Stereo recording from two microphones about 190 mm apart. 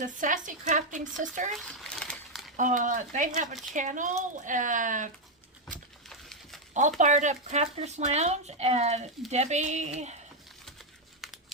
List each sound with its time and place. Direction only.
0.0 s speech: 45° right (ahead or behind)
1.5 s a sound: centre (ahead or behind)
2.6 s speech: 40° right (ahead or behind)
6.1 s a sound: centre (ahead or behind)
7.0 s speech: 40° right (ahead or behind)
11.2 s crumpling: centre (ahead or behind)